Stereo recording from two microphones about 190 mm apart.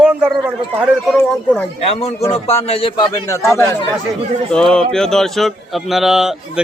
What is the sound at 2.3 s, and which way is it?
A man's voice, 35° left (ahead or behind).